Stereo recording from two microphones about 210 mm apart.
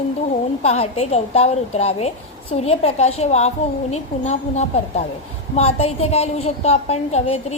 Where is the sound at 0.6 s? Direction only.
30° left (ahead or behind).